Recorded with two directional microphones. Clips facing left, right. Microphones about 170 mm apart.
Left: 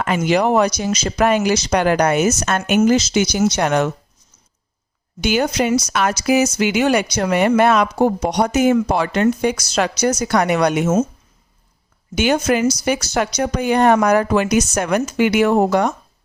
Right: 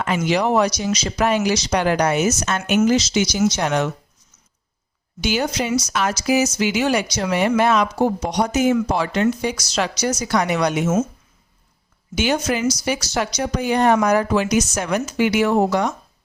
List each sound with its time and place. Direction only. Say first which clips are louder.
0.3 s speech: left 3 dB; 50° left (ahead or behind)
5.2 s speech: left 4 dB; 55° left (ahead or behind)
12.1 s speech: left 4 dB; 55° left (ahead or behind)